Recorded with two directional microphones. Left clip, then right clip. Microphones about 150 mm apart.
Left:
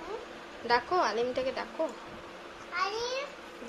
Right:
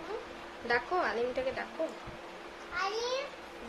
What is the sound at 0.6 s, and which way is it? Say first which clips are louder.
Speech: left 3 dB; 25° left (ahead or behind).